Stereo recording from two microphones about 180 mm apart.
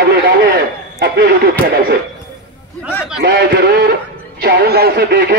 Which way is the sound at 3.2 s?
65° right (ahead or behind).